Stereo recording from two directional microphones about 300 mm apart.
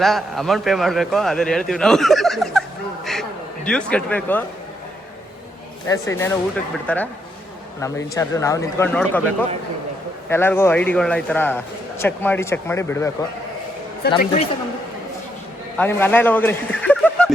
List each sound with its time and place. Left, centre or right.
0.0 s a man's voice: centre
3.1 s a sound: centre
5.9 s a man's voice: centre
10.2 s a man's voice: centre
14.0 s speech: left
15.8 s speech: centre